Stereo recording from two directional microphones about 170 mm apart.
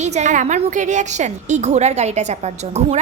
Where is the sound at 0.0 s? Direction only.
45° right (ahead or behind).